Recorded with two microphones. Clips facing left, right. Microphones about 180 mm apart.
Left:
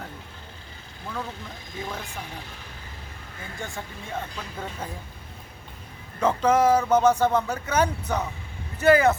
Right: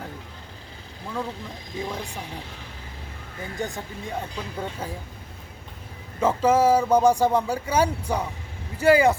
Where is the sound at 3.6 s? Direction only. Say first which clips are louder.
Right 4 dB; 20° right (ahead or behind).